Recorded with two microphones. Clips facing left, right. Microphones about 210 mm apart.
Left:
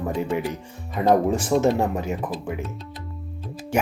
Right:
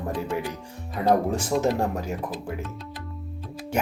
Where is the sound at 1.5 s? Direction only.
45° left (ahead or behind).